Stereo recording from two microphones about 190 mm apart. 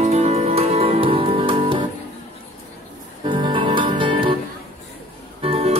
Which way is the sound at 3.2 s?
25° right (ahead or behind).